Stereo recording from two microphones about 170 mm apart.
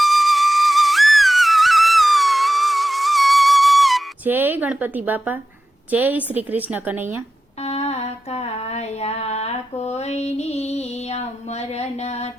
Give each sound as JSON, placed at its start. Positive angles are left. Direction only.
{"t": 0.0, "sound": "flute", "side_deg": 0}
{"t": 4.3, "sound": "a woman's voice", "side_deg": -10}
{"t": 7.6, "sound": "a sound", "side_deg": 40}